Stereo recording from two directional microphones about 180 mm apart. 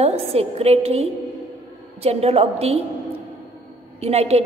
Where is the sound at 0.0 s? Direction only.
35° right (ahead or behind).